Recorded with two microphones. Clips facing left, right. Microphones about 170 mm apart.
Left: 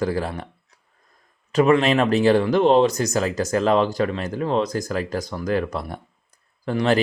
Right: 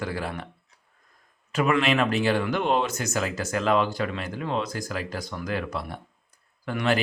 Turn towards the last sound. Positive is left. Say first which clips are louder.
# left 5 dB
turn(degrees=35)  # may be behind; listen again after turning